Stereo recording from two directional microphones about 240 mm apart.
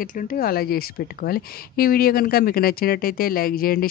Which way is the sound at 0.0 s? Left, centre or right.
Left.